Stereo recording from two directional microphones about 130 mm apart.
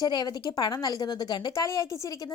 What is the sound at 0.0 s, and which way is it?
A woman's voice, 30° left (ahead or behind).